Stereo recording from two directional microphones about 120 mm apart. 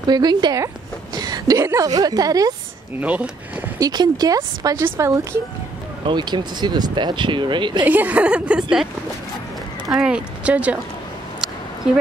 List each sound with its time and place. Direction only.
0.1 s speech: 35° right (ahead or behind)
1.1 s a sound: 30° right (ahead or behind)
1.6 s speech: 20° right (ahead or behind)
1.9 s speech: 35° right (ahead or behind)
3.0 s speech: 10° right (ahead or behind)
3.8 s speech: 35° right (ahead or behind)
6.0 s speech: 40° right (ahead or behind)
7.8 s speech: 15° right (ahead or behind)
9.8 s speech: 5° right (ahead or behind)